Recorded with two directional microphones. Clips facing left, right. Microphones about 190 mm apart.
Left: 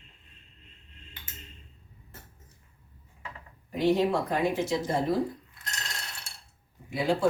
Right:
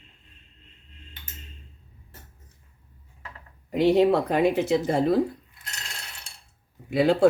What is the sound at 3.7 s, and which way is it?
Speech, 70° right (ahead or behind).